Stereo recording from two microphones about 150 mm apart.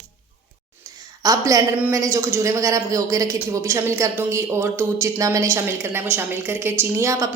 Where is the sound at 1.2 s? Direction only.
25° right (ahead or behind).